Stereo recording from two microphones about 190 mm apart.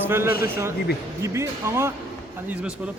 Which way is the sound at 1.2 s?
15° right (ahead or behind).